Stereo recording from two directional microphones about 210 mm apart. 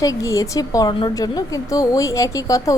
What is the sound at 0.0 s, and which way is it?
A woman's voice, 15° left (ahead or behind).